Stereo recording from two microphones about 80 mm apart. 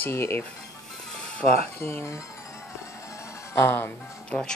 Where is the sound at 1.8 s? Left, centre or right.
Left.